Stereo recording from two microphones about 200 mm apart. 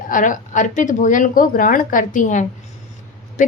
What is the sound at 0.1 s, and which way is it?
A woman's voice, 40° left (ahead or behind).